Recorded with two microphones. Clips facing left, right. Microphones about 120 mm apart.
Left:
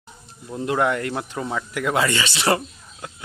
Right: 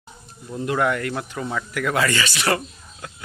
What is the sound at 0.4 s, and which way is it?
Speech, 20° left (ahead or behind).